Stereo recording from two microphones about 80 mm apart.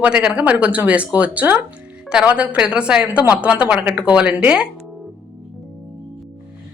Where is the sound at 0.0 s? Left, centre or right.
Centre.